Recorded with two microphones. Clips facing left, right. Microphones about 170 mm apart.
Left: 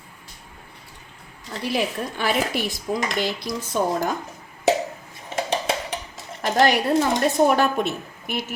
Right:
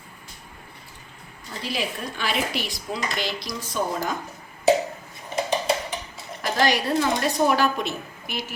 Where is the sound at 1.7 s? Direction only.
55° left (ahead or behind).